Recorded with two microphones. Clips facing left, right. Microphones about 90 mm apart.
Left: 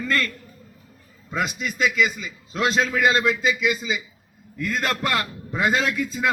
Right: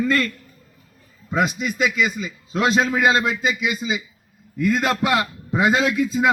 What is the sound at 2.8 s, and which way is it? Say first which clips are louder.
Speech: right 1 dB; 25° right (ahead or behind).